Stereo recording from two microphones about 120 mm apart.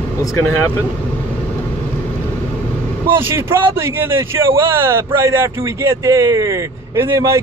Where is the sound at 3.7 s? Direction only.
20° right (ahead or behind).